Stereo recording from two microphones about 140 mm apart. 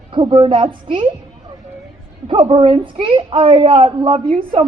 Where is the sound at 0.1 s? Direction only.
35° right (ahead or behind).